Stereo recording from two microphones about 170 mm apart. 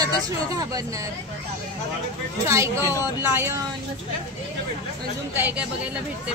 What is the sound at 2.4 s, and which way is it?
Speech, 15° right (ahead or behind).